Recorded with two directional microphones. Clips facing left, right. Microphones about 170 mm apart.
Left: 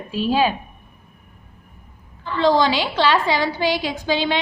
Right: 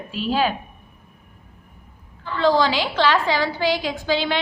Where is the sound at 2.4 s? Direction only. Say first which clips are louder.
Left 1 dB; 20° left (ahead or behind).